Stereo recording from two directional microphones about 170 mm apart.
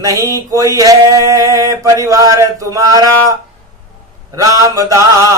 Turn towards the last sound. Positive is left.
turn(degrees=-20)  # may be behind; listen again after turning